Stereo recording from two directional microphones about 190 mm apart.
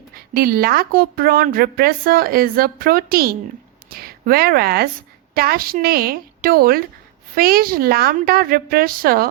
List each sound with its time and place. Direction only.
0.3 s a woman's voice: 50° right (ahead or behind)